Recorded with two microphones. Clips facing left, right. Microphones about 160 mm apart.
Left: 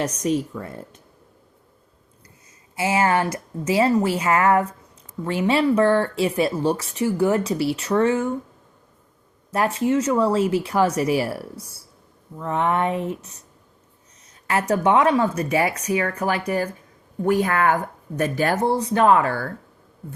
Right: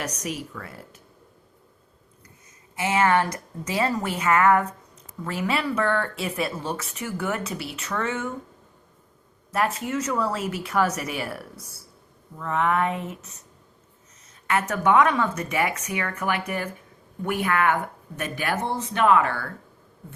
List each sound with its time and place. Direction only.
0.0 s speech: 30° left (ahead or behind)
2.8 s speech: 30° left (ahead or behind)
9.5 s speech: 30° left (ahead or behind)
14.4 s speech: 35° left (ahead or behind)